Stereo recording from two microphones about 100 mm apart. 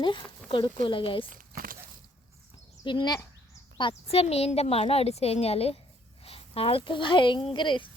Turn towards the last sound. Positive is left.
turn(degrees=55)  # may be behind; listen again after turning